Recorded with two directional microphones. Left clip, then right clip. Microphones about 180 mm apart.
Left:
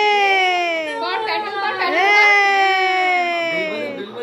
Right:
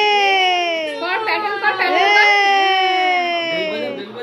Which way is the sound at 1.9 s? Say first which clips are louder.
Even; centre (ahead or behind).